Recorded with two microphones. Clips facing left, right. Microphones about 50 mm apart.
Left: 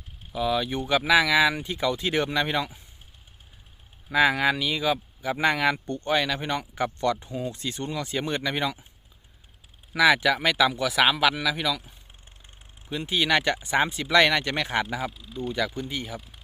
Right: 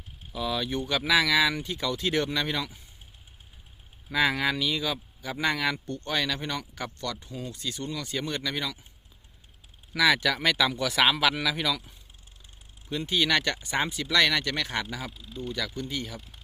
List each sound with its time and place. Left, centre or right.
0.3 s speech: centre
4.1 s speech: centre
7.3 s speech: centre
7.5 s speech: left
9.9 s speech: centre
12.9 s speech: centre
15.1 s speech: centre
15.5 s speech: centre